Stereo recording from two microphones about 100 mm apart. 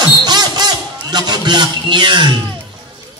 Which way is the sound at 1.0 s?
45° right (ahead or behind).